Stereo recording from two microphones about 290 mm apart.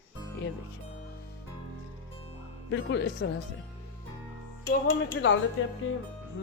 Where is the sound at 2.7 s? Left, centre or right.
Left.